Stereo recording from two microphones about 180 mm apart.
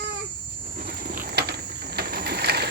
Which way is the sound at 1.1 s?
55° right (ahead or behind).